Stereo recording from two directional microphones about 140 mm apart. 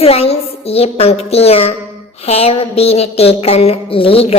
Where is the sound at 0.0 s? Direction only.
45° left (ahead or behind).